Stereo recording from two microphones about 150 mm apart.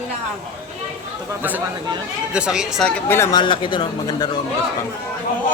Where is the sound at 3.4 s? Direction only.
35° left (ahead or behind).